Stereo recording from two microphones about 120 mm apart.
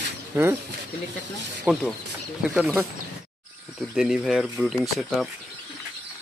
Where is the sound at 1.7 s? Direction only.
15° right (ahead or behind).